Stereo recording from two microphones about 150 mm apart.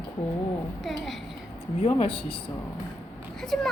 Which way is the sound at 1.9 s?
35° left (ahead or behind).